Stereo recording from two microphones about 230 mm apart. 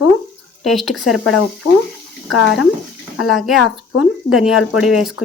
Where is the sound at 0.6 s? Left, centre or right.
Centre.